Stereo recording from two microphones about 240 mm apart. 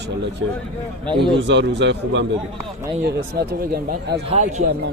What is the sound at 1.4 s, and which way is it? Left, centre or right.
Speech, right.